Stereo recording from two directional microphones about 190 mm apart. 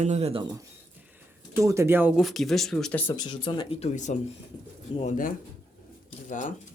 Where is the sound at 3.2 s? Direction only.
25° left (ahead or behind); by 6.5 s 45° left (ahead or behind).